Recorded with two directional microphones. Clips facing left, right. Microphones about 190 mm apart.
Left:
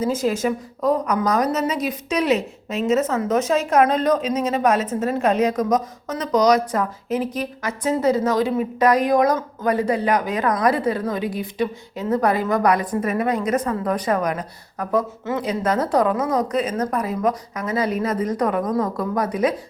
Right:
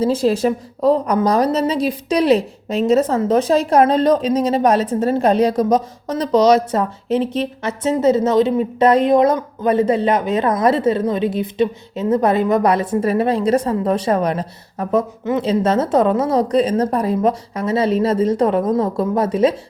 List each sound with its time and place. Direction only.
0.0 s a woman's voice: 30° right (ahead or behind)